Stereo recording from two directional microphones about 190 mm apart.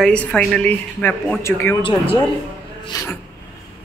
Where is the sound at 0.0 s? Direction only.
5° left (ahead or behind).